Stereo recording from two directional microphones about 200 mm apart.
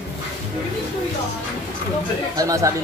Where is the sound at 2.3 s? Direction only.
15° right (ahead or behind).